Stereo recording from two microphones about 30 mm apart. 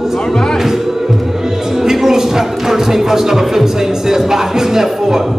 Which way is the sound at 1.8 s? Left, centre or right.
Centre.